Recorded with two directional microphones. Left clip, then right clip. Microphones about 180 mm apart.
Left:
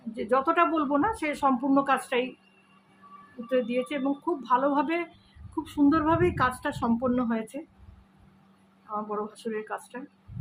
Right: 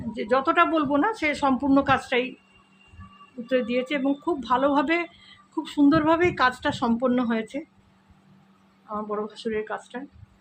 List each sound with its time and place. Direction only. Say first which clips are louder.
0.1 s speech: right 2 dB; 10° right (ahead or behind)
3.4 s speech: right 2 dB; 15° right (ahead or behind)
8.9 s speech: right 2 dB; 15° right (ahead or behind)